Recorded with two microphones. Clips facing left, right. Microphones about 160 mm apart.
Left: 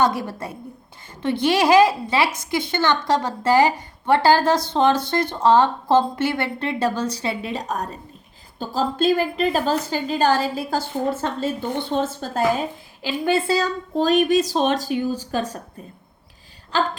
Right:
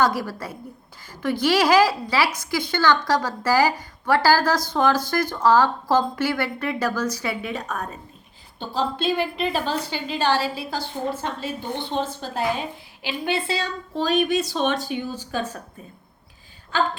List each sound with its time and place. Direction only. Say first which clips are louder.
0.0 s a woman's voice: left 1 dB; 25° left (ahead or behind); by 15.5 s 40° left (ahead or behind)